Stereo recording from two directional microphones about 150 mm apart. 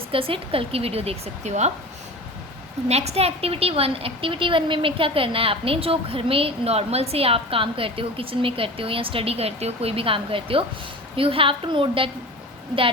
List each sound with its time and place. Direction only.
0.1 s a woman's voice: 35° right (ahead or behind)
2.9 s a woman's voice: 45° right (ahead or behind)